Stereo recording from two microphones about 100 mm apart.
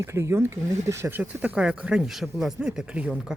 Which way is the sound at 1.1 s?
15° right (ahead or behind).